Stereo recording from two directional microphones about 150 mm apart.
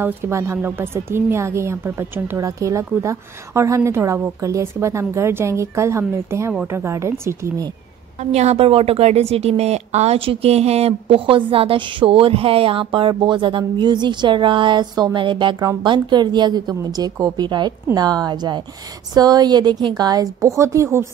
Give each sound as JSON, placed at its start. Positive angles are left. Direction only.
{"t": 0.0, "sound": "a woman's voice", "side_deg": -15}
{"t": 8.2, "sound": "a woman's voice", "side_deg": -45}